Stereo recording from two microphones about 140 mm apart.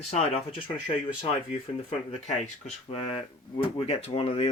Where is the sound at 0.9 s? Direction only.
40° left (ahead or behind).